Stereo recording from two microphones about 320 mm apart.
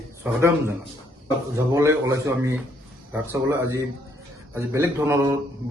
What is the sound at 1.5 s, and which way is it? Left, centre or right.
A man's voice, centre.